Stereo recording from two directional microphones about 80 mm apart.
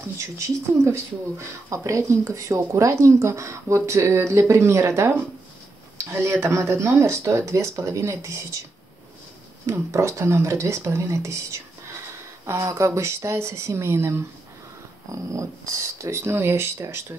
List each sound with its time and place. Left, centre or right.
1.7 s speech: right
9.7 s speech: right